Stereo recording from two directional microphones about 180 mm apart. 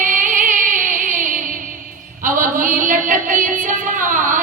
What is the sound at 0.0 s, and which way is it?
Music, 45° right (ahead or behind).